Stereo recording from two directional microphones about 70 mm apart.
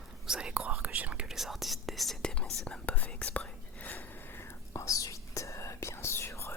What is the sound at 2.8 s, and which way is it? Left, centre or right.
Whispering, left.